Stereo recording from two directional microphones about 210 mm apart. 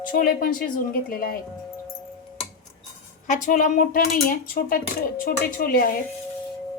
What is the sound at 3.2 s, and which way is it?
A woman's voice, 40° left (ahead or behind).